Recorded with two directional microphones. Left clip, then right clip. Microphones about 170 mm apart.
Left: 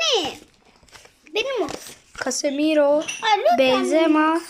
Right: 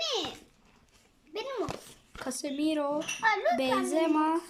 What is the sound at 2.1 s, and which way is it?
Speech, 25° right (ahead or behind).